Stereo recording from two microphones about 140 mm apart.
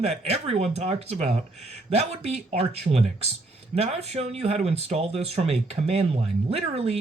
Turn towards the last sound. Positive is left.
turn(degrees=-45)  # may be behind; listen again after turning